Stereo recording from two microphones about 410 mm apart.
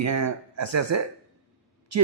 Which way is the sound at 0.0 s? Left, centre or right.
Right.